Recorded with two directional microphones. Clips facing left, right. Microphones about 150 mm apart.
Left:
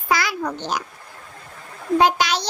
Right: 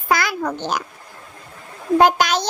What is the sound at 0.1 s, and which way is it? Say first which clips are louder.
Babbling: right 2 dB; 50° right (ahead or behind).